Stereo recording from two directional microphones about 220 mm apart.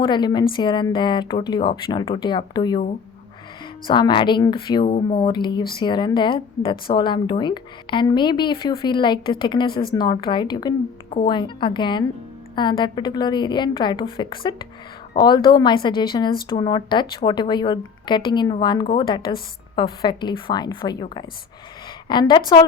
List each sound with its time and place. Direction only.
0.0 s speech: 20° left (ahead or behind)
3.8 s speech: 20° left (ahead or behind)